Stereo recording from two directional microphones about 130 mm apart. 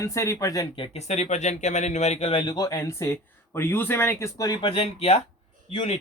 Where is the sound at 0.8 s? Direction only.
55° left (ahead or behind).